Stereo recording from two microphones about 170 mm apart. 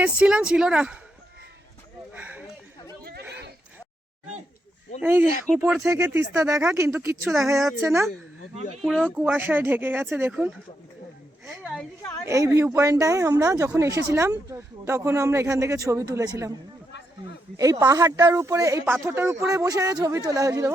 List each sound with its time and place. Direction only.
0.0 s speech: 5° right (ahead or behind)
2.1 s a sound: 10° right (ahead or behind)
3.0 s chatter: 65° right (ahead or behind)
4.9 s speech: 10° right (ahead or behind)
7.5 s speech: centre (ahead or behind)
9.1 s speech: 10° right (ahead or behind)
11.4 s a woman's voice: centre (ahead or behind)
12.2 s speech: 20° right (ahead or behind)
17.6 s speech: 20° right (ahead or behind)